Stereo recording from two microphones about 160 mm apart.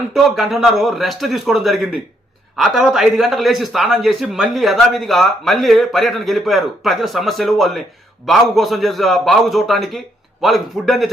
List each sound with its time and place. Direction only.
0.1 s a man's voice: centre (ahead or behind)